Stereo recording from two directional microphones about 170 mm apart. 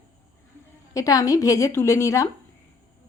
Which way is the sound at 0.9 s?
20° left (ahead or behind).